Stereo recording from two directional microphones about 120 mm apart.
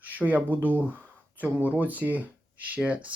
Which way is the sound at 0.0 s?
15° right (ahead or behind).